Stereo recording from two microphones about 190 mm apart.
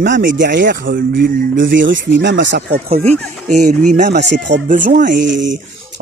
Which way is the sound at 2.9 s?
35° right (ahead or behind).